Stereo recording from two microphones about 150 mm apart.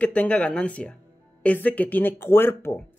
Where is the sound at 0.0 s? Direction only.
10° left (ahead or behind).